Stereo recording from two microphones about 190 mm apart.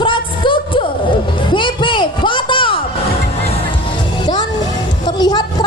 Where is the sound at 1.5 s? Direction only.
25° left (ahead or behind).